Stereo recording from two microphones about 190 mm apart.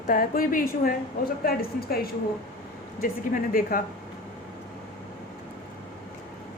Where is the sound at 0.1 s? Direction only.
45° left (ahead or behind).